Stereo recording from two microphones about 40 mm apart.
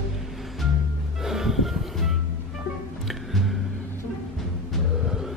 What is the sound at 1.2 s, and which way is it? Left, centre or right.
Music, centre.